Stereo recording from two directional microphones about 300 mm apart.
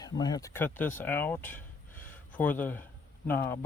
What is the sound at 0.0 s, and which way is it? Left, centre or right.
Speech, centre.